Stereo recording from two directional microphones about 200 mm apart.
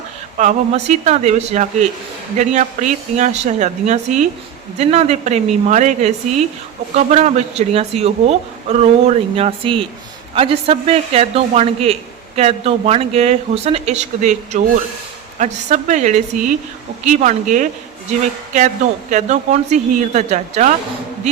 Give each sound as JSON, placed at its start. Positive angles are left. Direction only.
{"t": 0.3, "sound": "a woman's voice", "side_deg": -35}
{"t": 19.1, "sound": "speech", "side_deg": -35}